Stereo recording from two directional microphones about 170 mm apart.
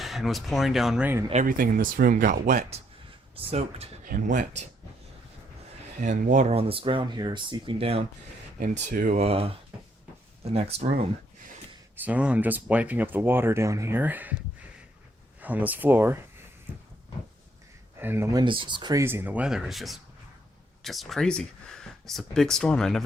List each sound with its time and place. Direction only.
0.0 s speech: centre (ahead or behind)
1.3 s speech: 50° right (ahead or behind)
4.0 s speech: 50° right (ahead or behind)
6.0 s speech: 45° right (ahead or behind)
8.5 s speech: 50° right (ahead or behind)
9.2 s speech: 35° right (ahead or behind)
12.0 s speech: 5° right (ahead or behind)
15.4 s speech: 10° right (ahead or behind)
18.0 s speech: 15° right (ahead or behind); by 23.0 s 5° left (ahead or behind)